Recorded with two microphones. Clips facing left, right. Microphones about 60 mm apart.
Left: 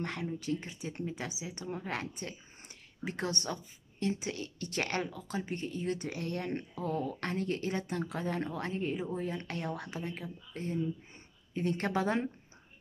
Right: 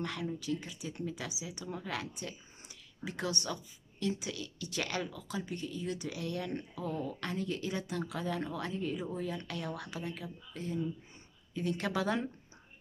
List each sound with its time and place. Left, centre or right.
0.0 s speech: left